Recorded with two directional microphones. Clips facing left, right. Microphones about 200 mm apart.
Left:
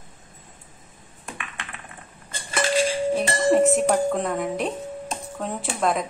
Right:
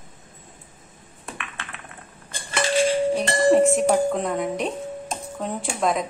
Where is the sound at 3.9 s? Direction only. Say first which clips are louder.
Right 1 dB; centre (ahead or behind).